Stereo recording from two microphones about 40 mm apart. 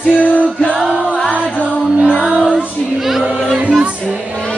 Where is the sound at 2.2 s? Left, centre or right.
Right.